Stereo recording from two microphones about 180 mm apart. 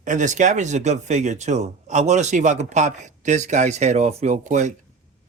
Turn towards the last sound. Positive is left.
turn(degrees=-40)  # may be behind; listen again after turning